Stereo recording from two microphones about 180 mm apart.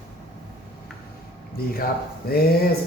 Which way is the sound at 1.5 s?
55° left (ahead or behind).